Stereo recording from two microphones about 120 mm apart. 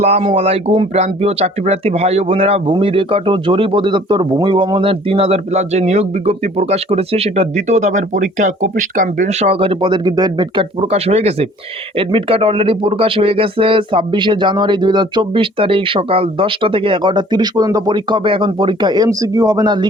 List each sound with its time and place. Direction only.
0.0 s speech: 60° right (ahead or behind); by 19.9 s 40° right (ahead or behind)